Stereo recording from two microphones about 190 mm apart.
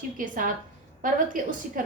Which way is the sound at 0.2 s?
45° right (ahead or behind).